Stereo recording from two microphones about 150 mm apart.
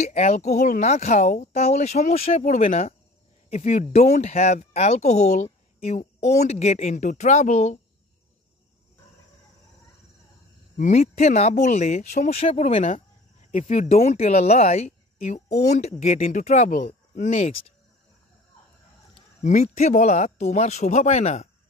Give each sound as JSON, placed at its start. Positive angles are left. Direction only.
{"t": 0.0, "sound": "speech", "side_deg": 50}
{"t": 10.8, "sound": "speech", "side_deg": 50}
{"t": 13.8, "sound": "speech", "side_deg": 45}
{"t": 19.4, "sound": "speech", "side_deg": 50}